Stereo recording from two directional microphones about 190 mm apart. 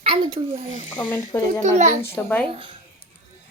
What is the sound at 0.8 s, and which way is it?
Speech, 40° left (ahead or behind).